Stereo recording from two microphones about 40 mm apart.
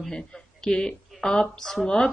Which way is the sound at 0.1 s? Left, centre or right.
Centre.